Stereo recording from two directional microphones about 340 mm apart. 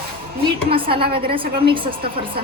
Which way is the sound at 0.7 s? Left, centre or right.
Centre.